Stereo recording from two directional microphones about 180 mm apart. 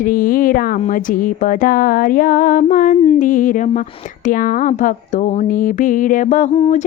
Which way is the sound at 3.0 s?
35° left (ahead or behind).